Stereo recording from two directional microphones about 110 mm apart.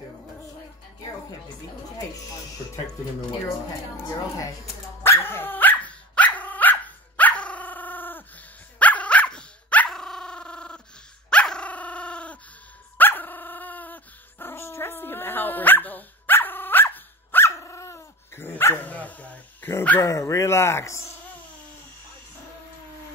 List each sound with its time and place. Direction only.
5.2 s dog: 20° left (ahead or behind)
20.0 s bow-wow: 30° left (ahead or behind)